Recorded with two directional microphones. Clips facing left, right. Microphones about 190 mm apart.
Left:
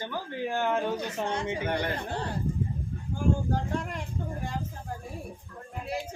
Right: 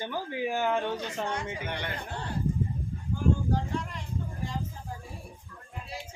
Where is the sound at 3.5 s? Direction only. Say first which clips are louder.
Left 1 dB; 50° left (ahead or behind).